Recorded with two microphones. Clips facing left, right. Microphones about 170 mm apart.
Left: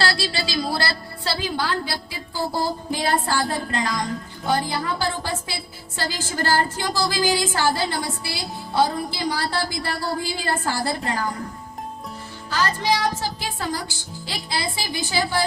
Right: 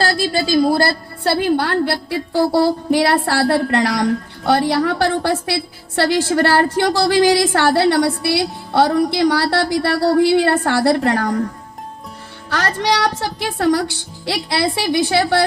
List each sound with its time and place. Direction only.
0.0 s a woman's voice: 45° right (ahead or behind); by 11.3 s 70° right (ahead or behind)
12.5 s a woman's voice: 75° right (ahead or behind)